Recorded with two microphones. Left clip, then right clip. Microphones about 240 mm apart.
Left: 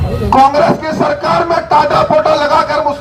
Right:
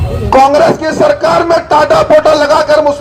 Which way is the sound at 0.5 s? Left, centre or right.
Right.